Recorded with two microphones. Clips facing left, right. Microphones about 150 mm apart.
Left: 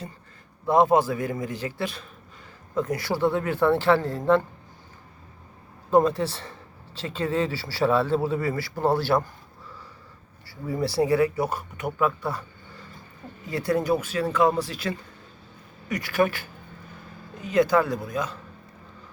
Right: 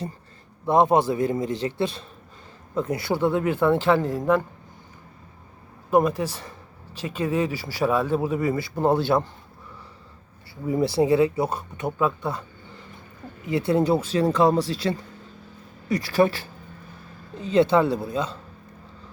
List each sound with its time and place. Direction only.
0.6 s speech: 20° right (ahead or behind)
5.9 s speech: 15° right (ahead or behind)
10.7 s speech: 20° right (ahead or behind)